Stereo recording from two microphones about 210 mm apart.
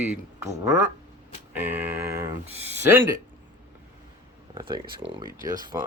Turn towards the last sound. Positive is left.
turn(degrees=-15)  # may be behind; listen again after turning